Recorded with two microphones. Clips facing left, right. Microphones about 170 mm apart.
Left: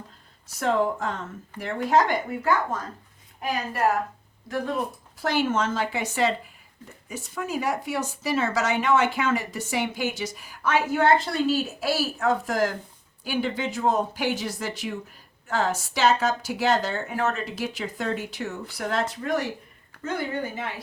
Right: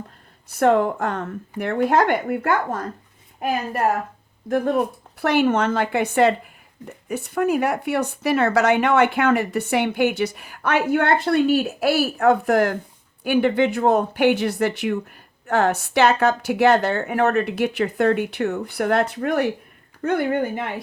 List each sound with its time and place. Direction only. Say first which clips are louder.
0.4 s a woman's voice: right 6 dB; 60° right (ahead or behind)
4.4 s a woman's voice: right 8 dB; 55° right (ahead or behind)